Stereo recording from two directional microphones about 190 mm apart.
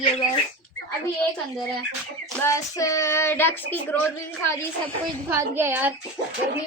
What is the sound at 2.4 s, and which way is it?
Child singing, 15° left (ahead or behind).